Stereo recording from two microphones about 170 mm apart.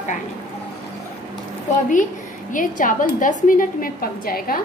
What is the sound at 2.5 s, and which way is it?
A woman's voice, 50° left (ahead or behind).